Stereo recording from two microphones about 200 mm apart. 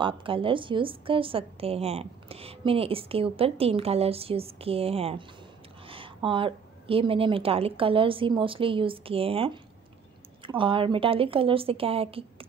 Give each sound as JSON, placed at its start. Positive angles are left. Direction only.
{"t": 0.0, "sound": "a woman's voice", "side_deg": -25}